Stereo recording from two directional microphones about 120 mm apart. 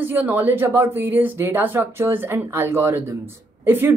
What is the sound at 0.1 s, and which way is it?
Speech, 15° right (ahead or behind).